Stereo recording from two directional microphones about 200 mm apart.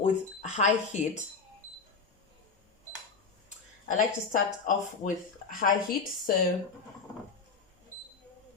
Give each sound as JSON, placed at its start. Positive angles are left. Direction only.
{"t": 0.0, "sound": "speech", "side_deg": 35}
{"t": 3.8, "sound": "speech", "side_deg": 40}